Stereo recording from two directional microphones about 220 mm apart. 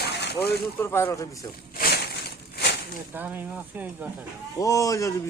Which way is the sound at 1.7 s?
45° left (ahead or behind).